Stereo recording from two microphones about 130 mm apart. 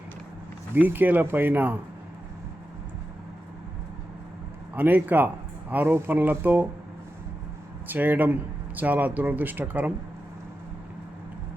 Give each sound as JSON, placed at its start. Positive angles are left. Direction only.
{"t": 0.7, "sound": "speech", "side_deg": -15}
{"t": 4.7, "sound": "speech", "side_deg": -15}
{"t": 7.9, "sound": "speech", "side_deg": -15}